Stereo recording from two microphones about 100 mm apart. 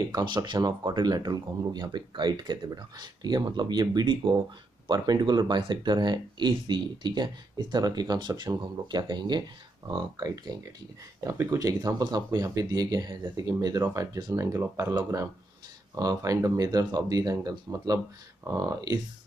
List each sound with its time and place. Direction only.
0.1 s speech: 45° right (ahead or behind)